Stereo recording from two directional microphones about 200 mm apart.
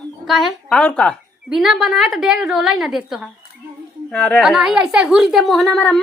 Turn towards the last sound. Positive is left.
turn(degrees=5)  # may be behind; listen again after turning